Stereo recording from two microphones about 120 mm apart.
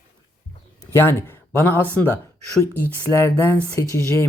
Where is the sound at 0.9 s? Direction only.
20° left (ahead or behind).